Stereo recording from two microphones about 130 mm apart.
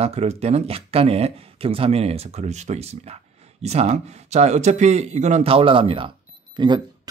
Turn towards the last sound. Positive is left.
turn(degrees=-35)  # may be behind; listen again after turning